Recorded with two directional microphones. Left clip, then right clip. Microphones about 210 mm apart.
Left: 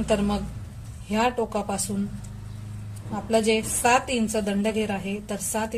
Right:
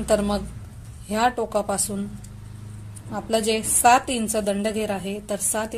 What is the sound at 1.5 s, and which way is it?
Speech, 35° right (ahead or behind).